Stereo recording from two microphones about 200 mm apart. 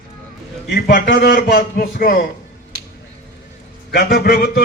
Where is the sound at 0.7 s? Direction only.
45° left (ahead or behind).